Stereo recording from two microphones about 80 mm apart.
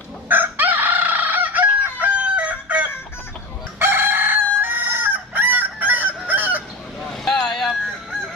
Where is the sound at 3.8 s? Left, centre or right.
Right.